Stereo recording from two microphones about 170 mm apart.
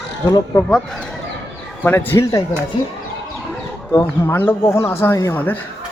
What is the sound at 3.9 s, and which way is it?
Speech, 15° left (ahead or behind).